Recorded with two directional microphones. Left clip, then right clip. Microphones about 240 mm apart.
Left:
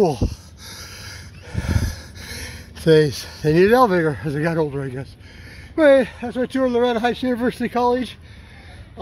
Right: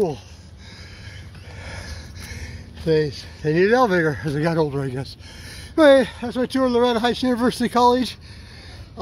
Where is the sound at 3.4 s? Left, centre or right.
Left.